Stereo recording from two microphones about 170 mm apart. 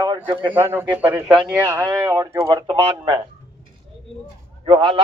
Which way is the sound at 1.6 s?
20° right (ahead or behind).